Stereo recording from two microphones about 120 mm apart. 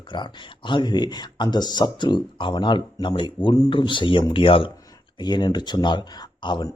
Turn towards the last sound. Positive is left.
turn(degrees=35)  # may be behind; listen again after turning